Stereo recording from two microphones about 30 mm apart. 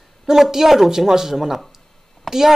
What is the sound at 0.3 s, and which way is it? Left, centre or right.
Speech, centre.